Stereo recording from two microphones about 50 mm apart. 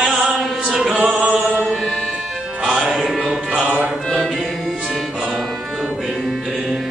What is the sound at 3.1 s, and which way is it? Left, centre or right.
Music, centre.